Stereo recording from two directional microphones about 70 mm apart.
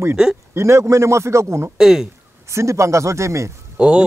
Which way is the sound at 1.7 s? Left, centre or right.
Centre.